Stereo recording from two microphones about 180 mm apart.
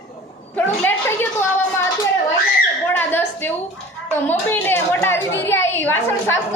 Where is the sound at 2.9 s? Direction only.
10° left (ahead or behind).